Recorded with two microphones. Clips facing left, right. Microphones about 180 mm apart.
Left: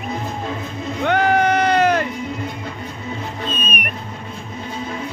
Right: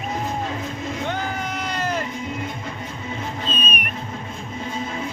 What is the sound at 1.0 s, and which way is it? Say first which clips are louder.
Sheep: left 14 dB; 70° left (ahead or behind).